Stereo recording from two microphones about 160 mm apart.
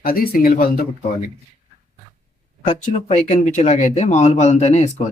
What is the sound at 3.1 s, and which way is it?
Speech, 50° left (ahead or behind).